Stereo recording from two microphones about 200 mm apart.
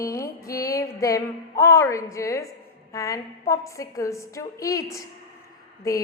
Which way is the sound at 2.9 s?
15° left (ahead or behind).